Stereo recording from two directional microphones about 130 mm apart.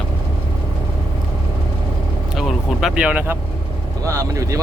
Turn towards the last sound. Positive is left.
turn(degrees=-25)  # may be behind; listen again after turning